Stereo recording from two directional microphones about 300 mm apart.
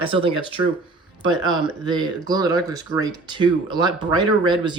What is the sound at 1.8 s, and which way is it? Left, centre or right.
Speech, centre.